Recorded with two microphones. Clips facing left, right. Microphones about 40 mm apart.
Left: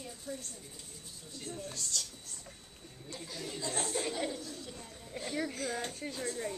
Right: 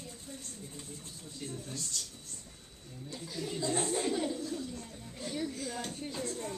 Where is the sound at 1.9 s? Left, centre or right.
Left.